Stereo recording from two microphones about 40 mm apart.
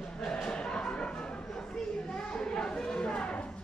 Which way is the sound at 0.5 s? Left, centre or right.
Left.